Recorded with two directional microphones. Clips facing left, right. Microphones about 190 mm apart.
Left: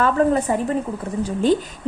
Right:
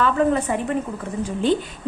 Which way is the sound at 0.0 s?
40° left (ahead or behind).